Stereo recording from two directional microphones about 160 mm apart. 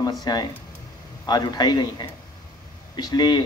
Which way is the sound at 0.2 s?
25° left (ahead or behind).